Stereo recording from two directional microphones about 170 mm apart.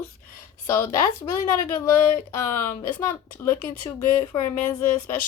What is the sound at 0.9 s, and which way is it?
Speech, 25° left (ahead or behind).